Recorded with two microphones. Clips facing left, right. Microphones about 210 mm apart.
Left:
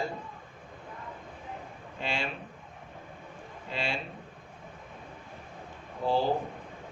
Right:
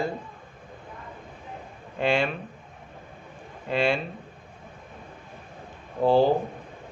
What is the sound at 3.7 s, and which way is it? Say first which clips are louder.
Speech: right 10 dB; 55° right (ahead or behind).